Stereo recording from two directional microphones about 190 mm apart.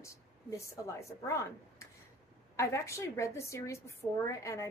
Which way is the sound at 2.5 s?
15° left (ahead or behind).